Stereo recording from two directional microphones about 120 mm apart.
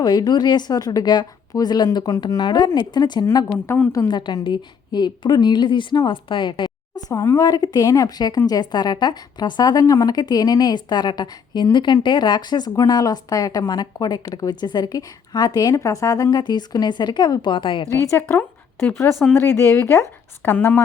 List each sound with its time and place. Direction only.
0.0 s speech: 35° left (ahead or behind)
3.5 s a woman's voice: 20° left (ahead or behind)
4.1 s a woman's voice: 40° left (ahead or behind)
7.1 s speech: 25° left (ahead or behind); by 17.8 s 45° left (ahead or behind)
17.9 s a woman's voice: 25° left (ahead or behind)